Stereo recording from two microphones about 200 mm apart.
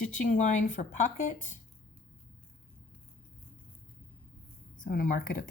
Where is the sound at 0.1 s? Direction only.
40° left (ahead or behind).